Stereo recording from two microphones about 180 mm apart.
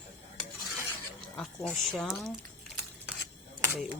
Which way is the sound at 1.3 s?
5° left (ahead or behind).